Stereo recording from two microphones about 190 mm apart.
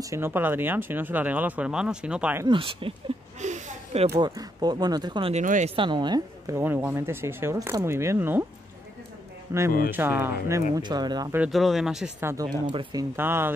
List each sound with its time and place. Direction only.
0.0 s a woman's voice: 15° right (ahead or behind)
2.4 s speech: 25° right (ahead or behind)
3.3 s a sound: 40° right (ahead or behind)
4.1 s speech: 20° right (ahead or behind)
5.3 s speech: 40° right (ahead or behind)
5.8 s a woman's voice: 25° right (ahead or behind)
9.5 s a woman's voice: 15° right (ahead or behind)
10.7 s speech: 20° right (ahead or behind)
11.3 s a woman's voice: 5° right (ahead or behind)